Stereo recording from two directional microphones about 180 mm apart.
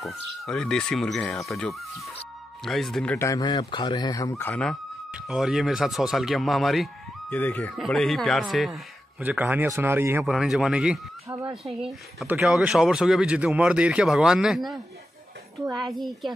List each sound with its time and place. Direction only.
0.0 s speech: centre (ahead or behind)
3.2 s speech: 20° left (ahead or behind); by 10.3 s 10° right (ahead or behind)
10.3 s speech: centre (ahead or behind)